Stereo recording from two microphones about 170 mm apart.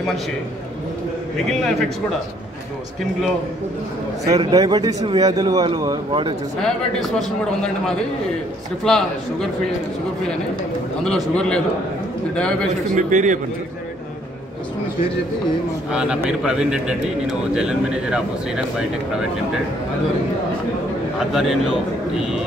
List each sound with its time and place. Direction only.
1.5 s speech: 5° left (ahead or behind)
4.3 s a man's voice: 20° right (ahead or behind)
6.6 s speech: centre (ahead or behind)
11.1 s speech: 5° left (ahead or behind)
12.9 s a man's voice: 45° right (ahead or behind)
15.9 s speech: 5° right (ahead or behind)
21.3 s speech: centre (ahead or behind)